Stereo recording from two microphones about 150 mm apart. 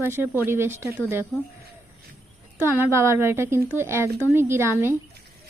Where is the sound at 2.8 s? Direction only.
15° right (ahead or behind).